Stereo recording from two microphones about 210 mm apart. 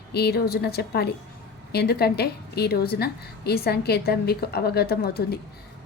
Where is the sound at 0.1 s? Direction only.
50° left (ahead or behind).